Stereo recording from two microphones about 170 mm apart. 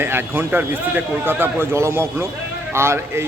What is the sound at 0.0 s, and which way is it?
A man's voice, 15° right (ahead or behind).